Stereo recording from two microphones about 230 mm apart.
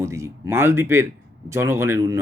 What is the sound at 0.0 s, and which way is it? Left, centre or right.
A man's voice, centre.